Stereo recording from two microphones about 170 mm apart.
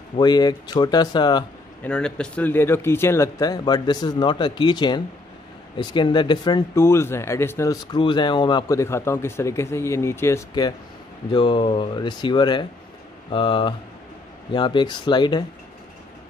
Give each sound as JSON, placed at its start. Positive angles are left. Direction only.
{"t": 0.2, "sound": "speech", "side_deg": 25}
{"t": 1.8, "sound": "speech", "side_deg": 5}